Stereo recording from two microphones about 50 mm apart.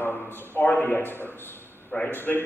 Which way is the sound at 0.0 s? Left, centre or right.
Left.